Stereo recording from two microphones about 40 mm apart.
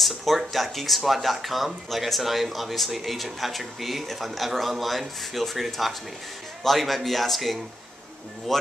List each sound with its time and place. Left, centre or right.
0.0 s speech: centre